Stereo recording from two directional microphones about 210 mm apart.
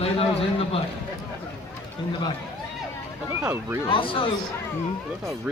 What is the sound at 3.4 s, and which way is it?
Speech, 5° right (ahead or behind).